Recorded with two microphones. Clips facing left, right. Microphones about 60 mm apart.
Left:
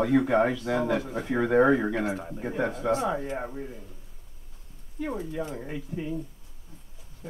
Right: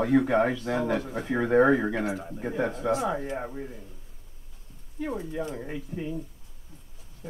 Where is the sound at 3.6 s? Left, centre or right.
Centre.